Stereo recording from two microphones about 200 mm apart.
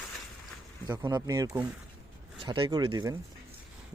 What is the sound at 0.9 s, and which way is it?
Speech, 20° right (ahead or behind).